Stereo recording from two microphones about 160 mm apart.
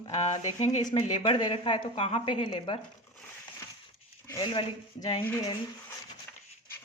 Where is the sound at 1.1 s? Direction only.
30° left (ahead or behind).